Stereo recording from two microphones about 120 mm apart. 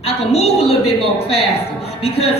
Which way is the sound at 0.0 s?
60° left (ahead or behind).